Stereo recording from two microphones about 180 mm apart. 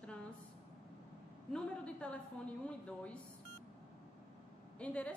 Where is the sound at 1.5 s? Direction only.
5° left (ahead or behind).